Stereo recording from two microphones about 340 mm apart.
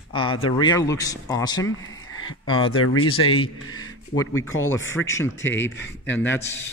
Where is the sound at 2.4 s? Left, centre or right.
Centre.